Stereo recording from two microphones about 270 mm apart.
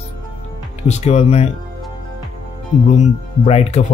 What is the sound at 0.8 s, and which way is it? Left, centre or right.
Speech, left.